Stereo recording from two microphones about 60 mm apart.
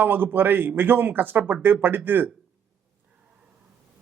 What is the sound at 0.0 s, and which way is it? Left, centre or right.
Speech, right.